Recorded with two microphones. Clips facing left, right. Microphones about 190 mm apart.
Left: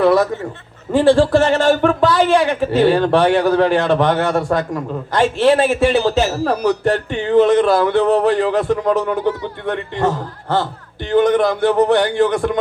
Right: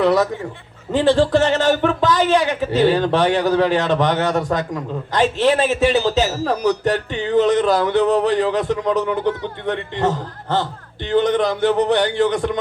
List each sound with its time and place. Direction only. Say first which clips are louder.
0.0 s a man's voice: left 3 dB; 50° left (ahead or behind)
2.0 s a man's voice: left 1 dB; 40° right (ahead or behind)
2.3 s a man's voice: left 3 dB; 45° left (ahead or behind)